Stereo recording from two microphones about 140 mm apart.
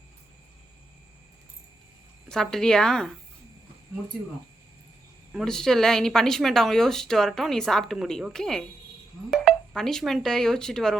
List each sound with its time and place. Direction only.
2.3 s speech: 5° left (ahead or behind)
5.3 s speech: centre (ahead or behind)